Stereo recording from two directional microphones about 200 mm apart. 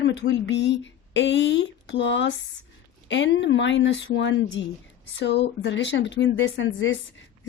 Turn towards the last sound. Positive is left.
turn(degrees=70)  # may be behind; listen again after turning